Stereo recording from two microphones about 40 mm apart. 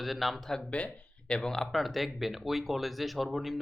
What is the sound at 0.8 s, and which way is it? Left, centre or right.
Speech, left.